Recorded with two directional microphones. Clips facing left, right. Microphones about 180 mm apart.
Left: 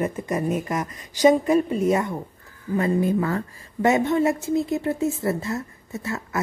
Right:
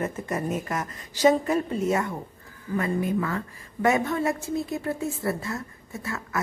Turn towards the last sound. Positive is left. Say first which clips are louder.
# left 4 dB
turn(degrees=25)  # may be behind; listen again after turning